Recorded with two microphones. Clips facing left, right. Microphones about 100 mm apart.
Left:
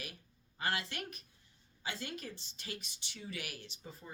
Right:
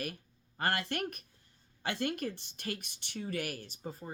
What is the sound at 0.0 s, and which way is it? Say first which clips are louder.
Speech: right 9 dB; 50° right (ahead or behind).